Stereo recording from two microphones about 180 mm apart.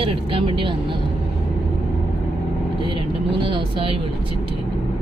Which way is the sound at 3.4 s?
30° right (ahead or behind).